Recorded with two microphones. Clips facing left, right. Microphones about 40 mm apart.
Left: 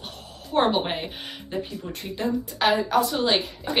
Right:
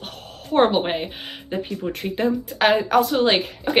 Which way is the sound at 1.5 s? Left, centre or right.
Right.